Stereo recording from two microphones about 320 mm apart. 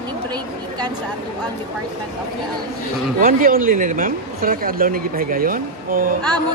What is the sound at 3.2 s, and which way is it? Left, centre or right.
Speech, right.